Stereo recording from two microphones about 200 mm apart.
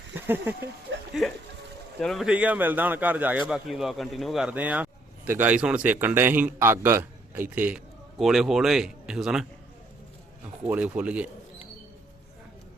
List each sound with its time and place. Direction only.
0.2 s speech: 10° right (ahead or behind)
0.9 s a sound: 60° right (ahead or behind)
2.0 s speech: centre (ahead or behind)
10.6 s speech: 10° right (ahead or behind)